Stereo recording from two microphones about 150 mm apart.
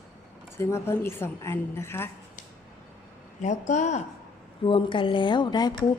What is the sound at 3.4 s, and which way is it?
Speech, 55° left (ahead or behind).